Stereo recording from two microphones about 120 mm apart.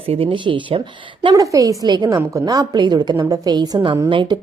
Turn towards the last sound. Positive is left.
turn(degrees=-40)  # may be behind; listen again after turning